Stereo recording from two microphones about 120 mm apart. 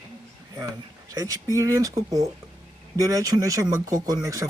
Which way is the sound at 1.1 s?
30° right (ahead or behind).